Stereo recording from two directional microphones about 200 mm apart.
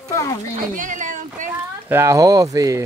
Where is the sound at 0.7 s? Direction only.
40° right (ahead or behind).